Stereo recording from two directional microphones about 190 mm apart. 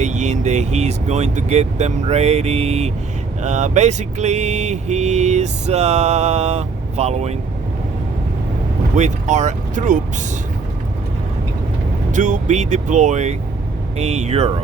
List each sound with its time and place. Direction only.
0.0 s vehicle: 40° right (ahead or behind)
9.0 s vehicle: 40° right (ahead or behind)
12.1 s vehicle: 40° right (ahead or behind)